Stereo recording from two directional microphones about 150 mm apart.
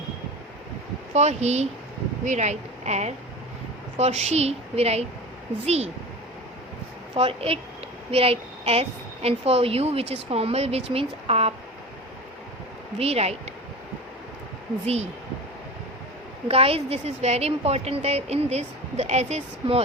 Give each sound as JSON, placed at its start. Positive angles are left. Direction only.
{"t": 1.1, "sound": "speech", "side_deg": -45}
{"t": 7.2, "sound": "a woman's voice", "side_deg": -40}
{"t": 13.0, "sound": "speech", "side_deg": -45}
{"t": 16.5, "sound": "speech", "side_deg": -40}